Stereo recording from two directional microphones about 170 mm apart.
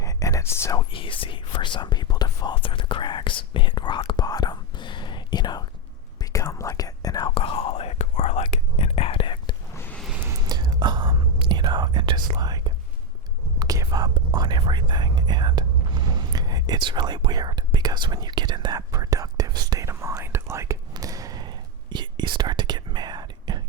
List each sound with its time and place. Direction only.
0.0 s speech: 20° left (ahead or behind)
6.1 s whispering: 20° left (ahead or behind)
9.7 s a sound: 10° left (ahead or behind)
10.2 s whispering: 20° right (ahead or behind)